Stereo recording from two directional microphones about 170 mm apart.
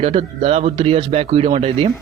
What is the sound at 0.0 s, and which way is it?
A man's voice, 35° right (ahead or behind).